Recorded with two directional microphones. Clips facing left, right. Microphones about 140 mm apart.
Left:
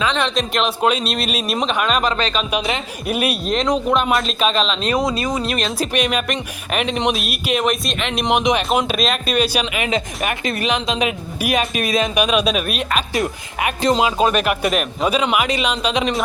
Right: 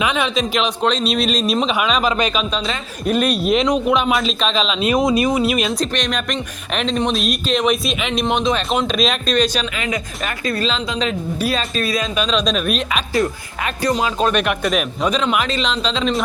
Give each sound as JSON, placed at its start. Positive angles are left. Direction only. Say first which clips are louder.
{"t": 0.0, "sound": "a man's voice", "louder": "right 1 dB", "side_deg": -5}
{"t": 2.5, "sound": "speech", "louder": "left 2 dB", "side_deg": 10}
{"t": 3.4, "sound": "a man's voice", "louder": "right 2 dB", "side_deg": -5}
{"t": 5.0, "sound": "speech", "louder": "right 5 dB", "side_deg": -20}
{"t": 5.8, "sound": "a man's voice", "louder": "left 2 dB", "side_deg": 5}
{"t": 8.3, "sound": "speech", "louder": "left 3 dB", "side_deg": 15}
{"t": 13.1, "sound": "speech", "louder": "right 2 dB", "side_deg": 20}